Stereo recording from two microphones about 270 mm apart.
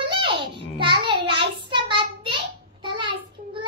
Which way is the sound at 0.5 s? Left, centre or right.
Centre.